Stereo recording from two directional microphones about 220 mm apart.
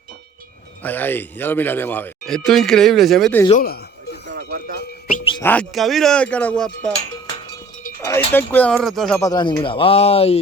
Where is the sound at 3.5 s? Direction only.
40° left (ahead or behind).